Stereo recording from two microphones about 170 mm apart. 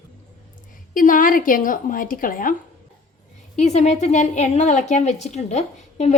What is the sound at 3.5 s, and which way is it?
A woman's voice, 40° left (ahead or behind).